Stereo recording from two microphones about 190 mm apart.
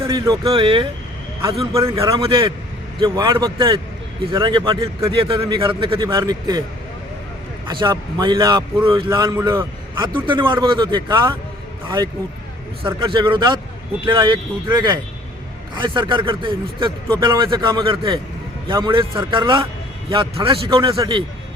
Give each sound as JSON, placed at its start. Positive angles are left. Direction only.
{"t": 0.1, "sound": "a man's voice", "side_deg": -25}
{"t": 1.4, "sound": "a man's voice", "side_deg": -15}
{"t": 2.2, "sound": "a man's voice", "side_deg": -30}
{"t": 7.7, "sound": "a man's voice", "side_deg": -25}
{"t": 10.2, "sound": "a man's voice", "side_deg": -25}